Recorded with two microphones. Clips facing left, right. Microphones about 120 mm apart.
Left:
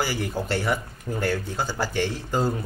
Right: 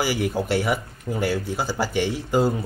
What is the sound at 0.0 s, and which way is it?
Speech, 10° right (ahead or behind).